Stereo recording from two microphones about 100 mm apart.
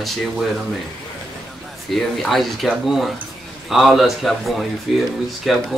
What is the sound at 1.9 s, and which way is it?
Speech, centre (ahead or behind).